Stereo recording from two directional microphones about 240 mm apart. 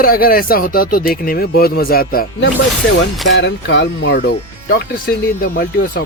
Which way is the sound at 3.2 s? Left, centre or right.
Left.